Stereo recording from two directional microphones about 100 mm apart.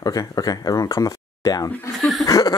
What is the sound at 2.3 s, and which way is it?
Chuckle, 35° left (ahead or behind).